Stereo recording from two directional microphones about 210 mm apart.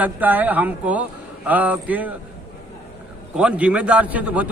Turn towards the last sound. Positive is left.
turn(degrees=-5)  # may be behind; listen again after turning